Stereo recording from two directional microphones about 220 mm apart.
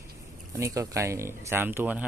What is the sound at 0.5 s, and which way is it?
Speech, 15° right (ahead or behind).